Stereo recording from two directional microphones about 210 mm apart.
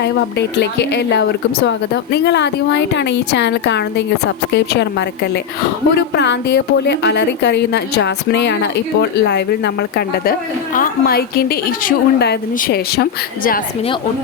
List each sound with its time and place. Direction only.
0.0 s a woman's voice: 50° left (ahead or behind)
6.1 s a woman's voice: 55° left (ahead or behind)
10.8 s a woman's voice: 45° left (ahead or behind)